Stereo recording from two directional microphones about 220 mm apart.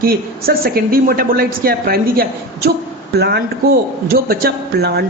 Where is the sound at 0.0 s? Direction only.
45° right (ahead or behind).